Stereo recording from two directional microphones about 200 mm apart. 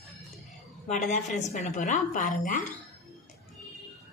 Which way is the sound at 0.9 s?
35° left (ahead or behind).